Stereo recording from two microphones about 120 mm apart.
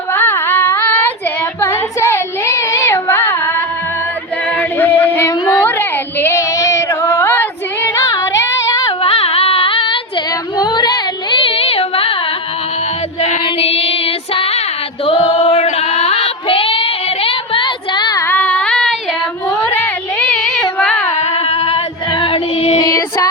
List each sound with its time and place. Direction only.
0.1 s child singing: 20° left (ahead or behind)
1.6 s a sound: 25° left (ahead or behind)
4.5 s child singing: 15° left (ahead or behind)
9.0 s a sound: 50° left (ahead or behind)
13.4 s child singing: 55° left (ahead or behind)
15.0 s female singing: 55° left (ahead or behind); by 18.2 s 35° left (ahead or behind)
18.2 s a sound: 15° left (ahead or behind)
21.3 s female singing: 55° left (ahead or behind)
22.1 s music: 45° left (ahead or behind)
22.8 s child singing: 35° left (ahead or behind)